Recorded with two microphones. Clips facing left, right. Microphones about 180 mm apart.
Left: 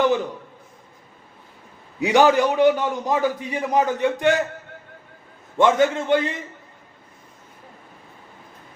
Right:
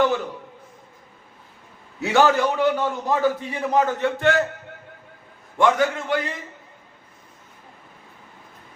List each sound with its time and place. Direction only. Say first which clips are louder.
2.0 s a man's voice: left 2 dB; 15° left (ahead or behind)
5.5 s a man's voice: left 2 dB; 20° left (ahead or behind)